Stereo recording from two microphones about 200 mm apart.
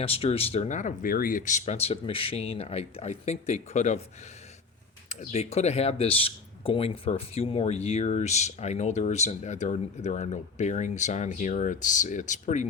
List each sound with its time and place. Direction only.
0.0 s speech: 30° left (ahead or behind)
5.0 s speech: 35° left (ahead or behind)